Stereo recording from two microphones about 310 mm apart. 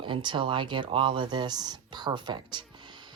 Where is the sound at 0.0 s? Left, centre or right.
Centre.